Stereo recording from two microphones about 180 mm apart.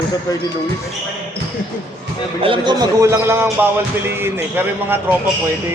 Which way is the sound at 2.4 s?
25° right (ahead or behind).